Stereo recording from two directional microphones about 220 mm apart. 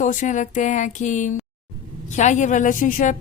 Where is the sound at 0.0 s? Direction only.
35° left (ahead or behind).